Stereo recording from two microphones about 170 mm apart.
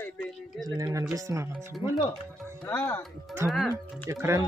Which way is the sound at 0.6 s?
20° right (ahead or behind).